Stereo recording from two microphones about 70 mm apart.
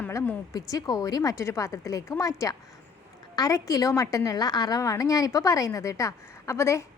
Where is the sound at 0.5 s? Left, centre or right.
Left.